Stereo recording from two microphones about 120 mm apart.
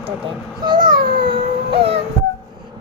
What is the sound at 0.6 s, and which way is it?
Speech, 40° right (ahead or behind).